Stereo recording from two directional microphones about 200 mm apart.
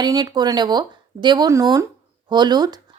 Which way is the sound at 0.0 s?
20° right (ahead or behind).